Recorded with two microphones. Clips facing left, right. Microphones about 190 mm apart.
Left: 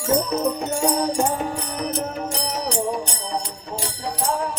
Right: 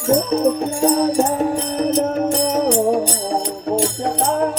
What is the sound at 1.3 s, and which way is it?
Music, 40° right (ahead or behind).